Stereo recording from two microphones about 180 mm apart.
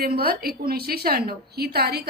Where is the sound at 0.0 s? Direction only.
60° right (ahead or behind).